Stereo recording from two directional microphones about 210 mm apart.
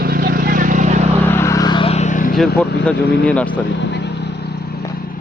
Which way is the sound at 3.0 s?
50° left (ahead or behind).